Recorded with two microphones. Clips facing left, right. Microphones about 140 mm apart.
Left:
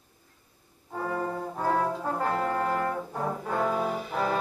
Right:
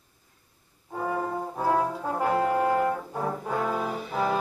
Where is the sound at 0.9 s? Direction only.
10° right (ahead or behind).